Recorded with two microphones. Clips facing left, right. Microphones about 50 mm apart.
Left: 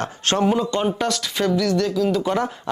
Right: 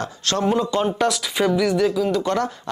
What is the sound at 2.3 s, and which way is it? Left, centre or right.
Speech, centre.